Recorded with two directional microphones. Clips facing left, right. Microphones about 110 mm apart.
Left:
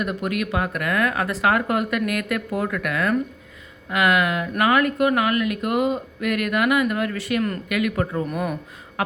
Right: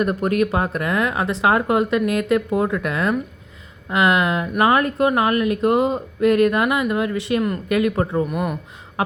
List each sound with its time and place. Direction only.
0.0 s a woman's voice: 40° right (ahead or behind)
8.3 s speech: 10° right (ahead or behind)
9.0 s a sound: 25° right (ahead or behind)